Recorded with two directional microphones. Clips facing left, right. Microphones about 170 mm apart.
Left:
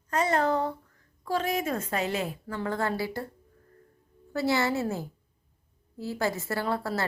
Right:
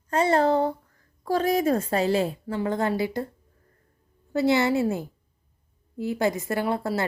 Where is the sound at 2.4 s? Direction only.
20° right (ahead or behind).